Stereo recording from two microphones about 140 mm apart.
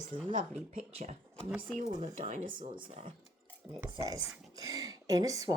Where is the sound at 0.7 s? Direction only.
55° right (ahead or behind).